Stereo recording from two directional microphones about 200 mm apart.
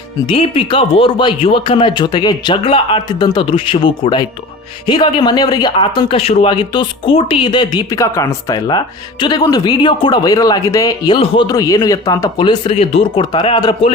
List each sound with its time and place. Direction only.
0.3 s speech: 30° left (ahead or behind)